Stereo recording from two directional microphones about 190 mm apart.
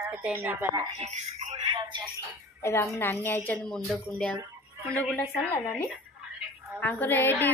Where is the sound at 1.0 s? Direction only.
40° right (ahead or behind).